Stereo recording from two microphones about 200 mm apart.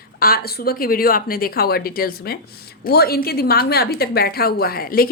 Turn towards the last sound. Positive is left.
turn(degrees=50)  # may be behind; listen again after turning